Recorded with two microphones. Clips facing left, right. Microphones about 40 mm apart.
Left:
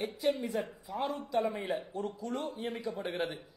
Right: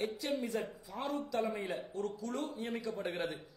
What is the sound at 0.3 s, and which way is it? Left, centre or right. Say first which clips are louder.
A man's voice: left 4 dB; centre.